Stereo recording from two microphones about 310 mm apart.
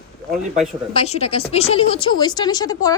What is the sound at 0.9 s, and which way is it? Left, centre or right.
A woman's voice, centre.